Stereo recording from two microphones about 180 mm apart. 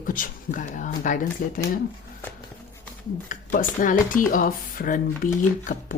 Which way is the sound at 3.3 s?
50° left (ahead or behind).